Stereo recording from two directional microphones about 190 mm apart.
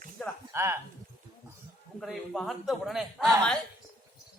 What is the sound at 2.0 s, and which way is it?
Speech, centre (ahead or behind).